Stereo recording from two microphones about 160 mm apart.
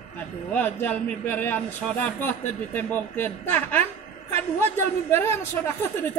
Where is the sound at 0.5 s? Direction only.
10° left (ahead or behind).